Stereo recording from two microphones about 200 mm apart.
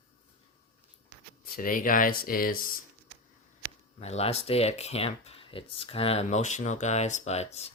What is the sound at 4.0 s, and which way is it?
Speech, 30° left (ahead or behind).